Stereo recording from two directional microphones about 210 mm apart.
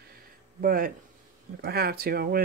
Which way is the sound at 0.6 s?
40° right (ahead or behind).